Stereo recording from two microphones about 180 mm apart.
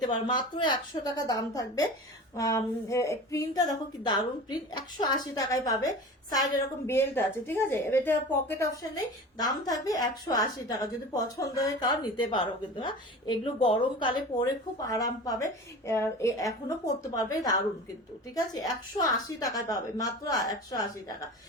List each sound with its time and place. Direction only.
0.3 s a woman's voice: 25° left (ahead or behind)